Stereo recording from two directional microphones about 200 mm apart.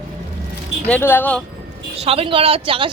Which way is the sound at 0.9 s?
10° left (ahead or behind).